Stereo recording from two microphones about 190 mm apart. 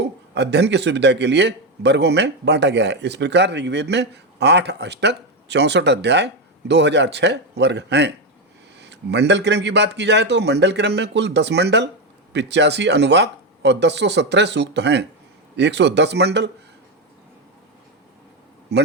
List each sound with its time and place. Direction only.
0.3 s a man's voice: 65° right (ahead or behind)
18.7 s a man's voice: 65° right (ahead or behind)